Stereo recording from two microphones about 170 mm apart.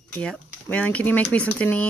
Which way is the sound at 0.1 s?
5° left (ahead or behind).